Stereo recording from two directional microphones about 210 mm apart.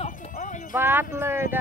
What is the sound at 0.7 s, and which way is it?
Speech, 10° right (ahead or behind).